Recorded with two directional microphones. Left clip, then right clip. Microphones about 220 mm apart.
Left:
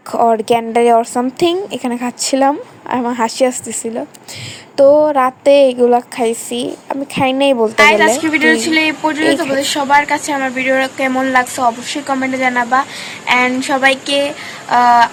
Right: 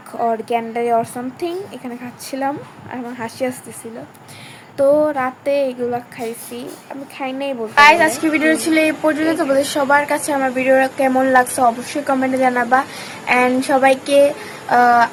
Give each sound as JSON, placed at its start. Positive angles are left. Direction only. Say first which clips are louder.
{"t": 0.1, "sound": "speech", "louder": "left 7 dB", "side_deg": 40}
{"t": 4.8, "sound": "speech", "louder": "left 6 dB", "side_deg": 35}
{"t": 7.8, "sound": "speech", "louder": "right 1 dB", "side_deg": 0}